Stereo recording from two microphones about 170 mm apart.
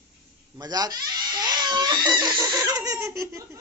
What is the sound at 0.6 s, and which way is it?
Speech, 25° right (ahead or behind).